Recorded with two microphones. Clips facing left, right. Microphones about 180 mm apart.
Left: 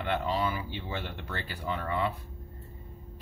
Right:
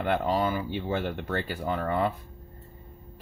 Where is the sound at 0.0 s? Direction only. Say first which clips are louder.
Right 4 dB; 45° right (ahead or behind).